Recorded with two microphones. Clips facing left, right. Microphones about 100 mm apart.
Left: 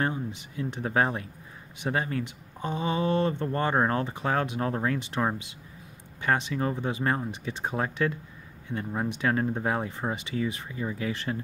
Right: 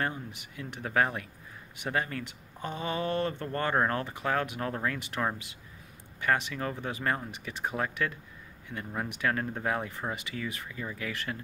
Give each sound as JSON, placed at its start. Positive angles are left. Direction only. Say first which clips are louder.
{"t": 0.0, "sound": "speech", "louder": "left 4 dB", "side_deg": 25}